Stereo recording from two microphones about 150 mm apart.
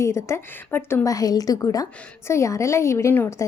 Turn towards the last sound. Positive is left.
turn(degrees=15)  # may be behind; listen again after turning